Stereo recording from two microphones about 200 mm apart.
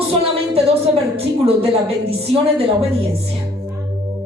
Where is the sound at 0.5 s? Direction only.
30° right (ahead or behind).